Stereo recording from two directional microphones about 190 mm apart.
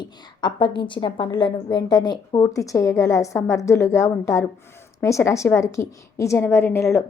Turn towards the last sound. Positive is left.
turn(degrees=15)  # may be behind; listen again after turning